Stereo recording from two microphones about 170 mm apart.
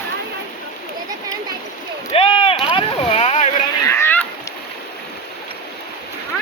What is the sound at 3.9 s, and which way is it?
Rowboat, 15° left (ahead or behind).